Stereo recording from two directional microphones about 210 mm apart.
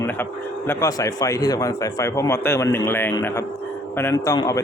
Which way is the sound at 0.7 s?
15° left (ahead or behind).